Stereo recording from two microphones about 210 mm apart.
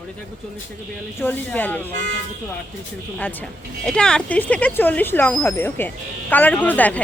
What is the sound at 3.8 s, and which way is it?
A woman's voice, 5° left (ahead or behind).